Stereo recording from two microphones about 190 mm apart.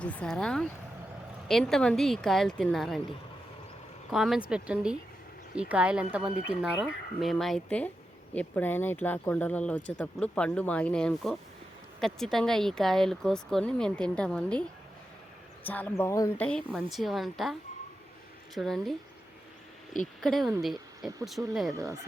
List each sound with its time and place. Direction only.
0.0 s speech: 5° left (ahead or behind)
4.1 s speech: centre (ahead or behind)
15.6 s speech: 10° left (ahead or behind)
16.4 s speech: 5° left (ahead or behind)
20.2 s speech: centre (ahead or behind); by 22.0 s 15° right (ahead or behind)